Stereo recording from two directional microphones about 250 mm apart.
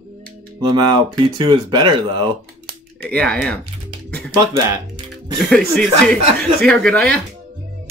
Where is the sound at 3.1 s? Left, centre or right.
Centre.